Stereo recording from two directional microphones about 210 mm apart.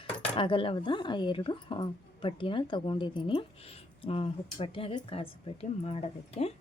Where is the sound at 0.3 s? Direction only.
25° left (ahead or behind).